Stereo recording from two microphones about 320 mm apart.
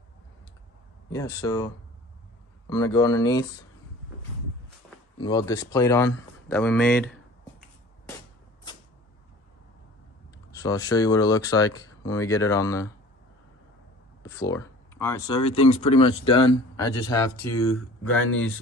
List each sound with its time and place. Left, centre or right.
1.1 s speech: centre
2.7 s speech: centre
5.2 s speech: centre
10.5 s speech: centre
14.2 s speech: centre